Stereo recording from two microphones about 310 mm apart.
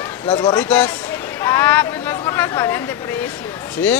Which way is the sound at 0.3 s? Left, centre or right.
Centre.